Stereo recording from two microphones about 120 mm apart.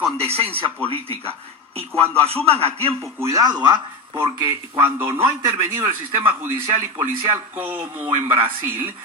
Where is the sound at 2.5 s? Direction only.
55° right (ahead or behind).